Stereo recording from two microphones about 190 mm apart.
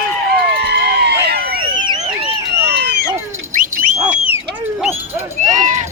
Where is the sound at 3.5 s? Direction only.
45° right (ahead or behind).